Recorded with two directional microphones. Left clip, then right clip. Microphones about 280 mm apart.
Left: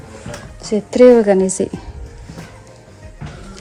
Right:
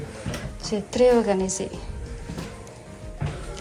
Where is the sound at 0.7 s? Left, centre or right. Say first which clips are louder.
Left 10 dB; left.